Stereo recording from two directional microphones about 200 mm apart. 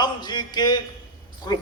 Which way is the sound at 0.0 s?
20° left (ahead or behind).